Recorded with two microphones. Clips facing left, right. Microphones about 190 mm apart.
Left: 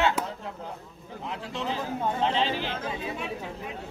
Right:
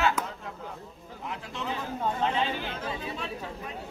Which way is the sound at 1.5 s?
30° left (ahead or behind).